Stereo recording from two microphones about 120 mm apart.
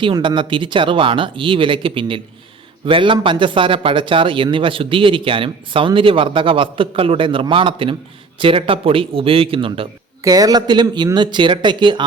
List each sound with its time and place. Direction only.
0.0 s speech: 40° right (ahead or behind)
10.2 s speech: 30° right (ahead or behind)